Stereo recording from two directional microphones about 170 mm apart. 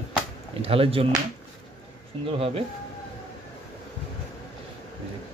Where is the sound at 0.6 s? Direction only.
35° right (ahead or behind).